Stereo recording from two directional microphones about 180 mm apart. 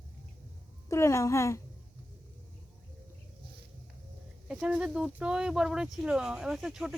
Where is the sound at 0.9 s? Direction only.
15° left (ahead or behind).